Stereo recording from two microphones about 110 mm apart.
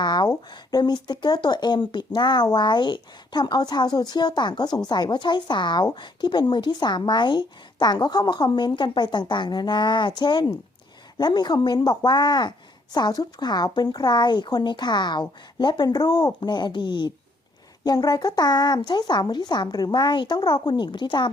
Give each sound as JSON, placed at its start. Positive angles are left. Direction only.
{"t": 0.0, "sound": "speech", "side_deg": 40}